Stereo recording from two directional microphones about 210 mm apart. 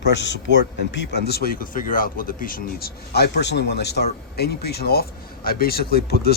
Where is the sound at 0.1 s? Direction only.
60° left (ahead or behind).